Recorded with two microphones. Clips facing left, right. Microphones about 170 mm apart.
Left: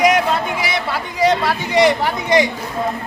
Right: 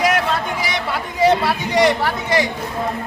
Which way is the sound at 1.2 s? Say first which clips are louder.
Right 1 dB; 5° right (ahead or behind).